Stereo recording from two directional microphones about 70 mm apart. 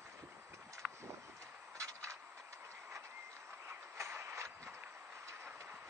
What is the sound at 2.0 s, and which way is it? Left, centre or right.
Train, right.